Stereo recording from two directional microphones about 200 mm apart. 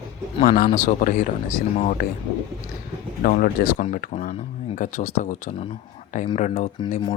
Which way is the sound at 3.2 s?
45° left (ahead or behind).